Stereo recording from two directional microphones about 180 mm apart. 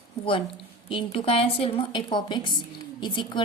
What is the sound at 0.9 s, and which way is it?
A woman's voice, 30° left (ahead or behind).